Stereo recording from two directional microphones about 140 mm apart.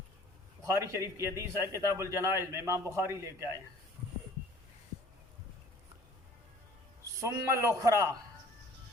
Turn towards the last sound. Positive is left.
turn(degrees=-20)  # may be behind; listen again after turning